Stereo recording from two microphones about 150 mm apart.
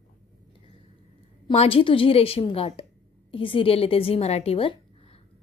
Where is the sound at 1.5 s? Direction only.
40° left (ahead or behind).